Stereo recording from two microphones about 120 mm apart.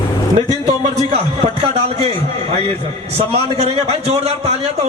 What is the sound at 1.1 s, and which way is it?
A man's voice, 55° right (ahead or behind).